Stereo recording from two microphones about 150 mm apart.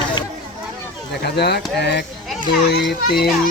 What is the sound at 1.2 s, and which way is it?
Speech, 90° left.